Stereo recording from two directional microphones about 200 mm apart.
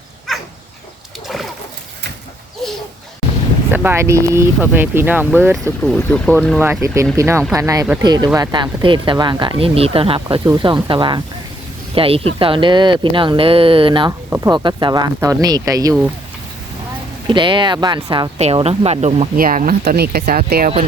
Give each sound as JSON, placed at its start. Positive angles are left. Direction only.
{"t": 3.7, "sound": "speech", "side_deg": -10}
{"t": 5.8, "sound": "speech", "side_deg": 5}
{"t": 6.6, "sound": "speech", "side_deg": -15}
{"t": 14.3, "sound": "speech", "side_deg": -10}
{"t": 14.5, "sound": "speech", "side_deg": -20}
{"t": 17.2, "sound": "speech", "side_deg": -25}